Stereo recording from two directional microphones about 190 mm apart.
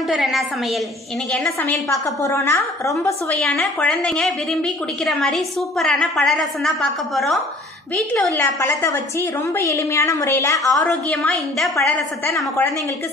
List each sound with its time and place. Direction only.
0.1 s a woman's voice: centre (ahead or behind)
1.9 s a woman's voice: 15° left (ahead or behind)
3.3 s a woman's voice: 5° left (ahead or behind)
10.7 s a woman's voice: 5° left (ahead or behind)